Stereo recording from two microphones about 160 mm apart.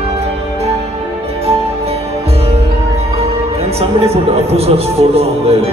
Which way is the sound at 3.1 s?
40° right (ahead or behind).